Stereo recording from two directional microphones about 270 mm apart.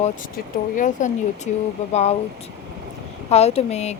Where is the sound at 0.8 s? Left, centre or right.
Left.